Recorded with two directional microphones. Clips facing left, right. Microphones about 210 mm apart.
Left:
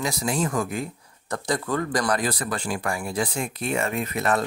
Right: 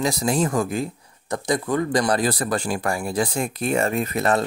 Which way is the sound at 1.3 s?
15° right (ahead or behind).